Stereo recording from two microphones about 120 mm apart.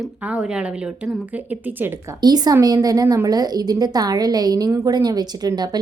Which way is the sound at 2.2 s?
35° right (ahead or behind).